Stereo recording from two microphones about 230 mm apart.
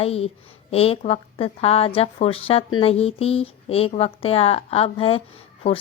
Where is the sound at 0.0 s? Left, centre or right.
Left.